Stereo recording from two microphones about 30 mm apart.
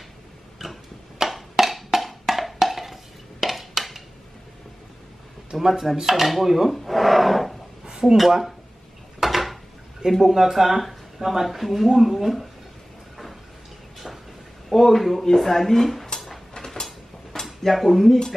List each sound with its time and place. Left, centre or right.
0.6 s tick-tock: centre
1.3 s music: centre
5.5 s dishes: centre
5.9 s speech: centre
9.2 s dishes: centre
10.2 s speech: centre
13.9 s a sound: centre
14.7 s speech: centre
16.5 s a sound: centre
17.5 s speech: centre